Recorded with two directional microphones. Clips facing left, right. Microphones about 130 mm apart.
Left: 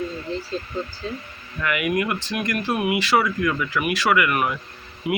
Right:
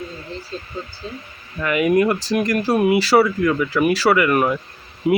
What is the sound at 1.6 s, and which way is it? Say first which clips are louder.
Speech: right 7 dB; 30° right (ahead or behind).